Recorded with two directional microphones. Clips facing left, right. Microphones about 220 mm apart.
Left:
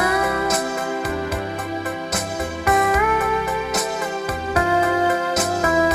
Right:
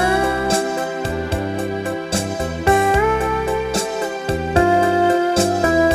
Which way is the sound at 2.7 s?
30° right (ahead or behind).